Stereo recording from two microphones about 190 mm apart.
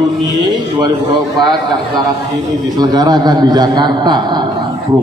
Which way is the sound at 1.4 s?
20° right (ahead or behind).